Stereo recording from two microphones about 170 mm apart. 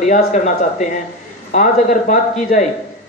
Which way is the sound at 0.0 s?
45° left (ahead or behind).